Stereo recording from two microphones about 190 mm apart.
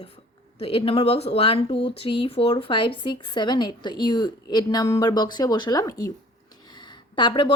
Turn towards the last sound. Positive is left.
turn(degrees=25)  # may be behind; listen again after turning